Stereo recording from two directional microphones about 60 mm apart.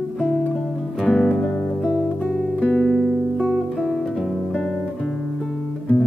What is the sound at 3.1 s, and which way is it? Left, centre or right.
Music, centre.